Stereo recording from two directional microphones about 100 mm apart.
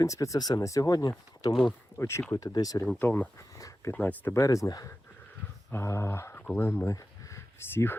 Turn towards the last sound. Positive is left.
turn(degrees=30)  # may be behind; listen again after turning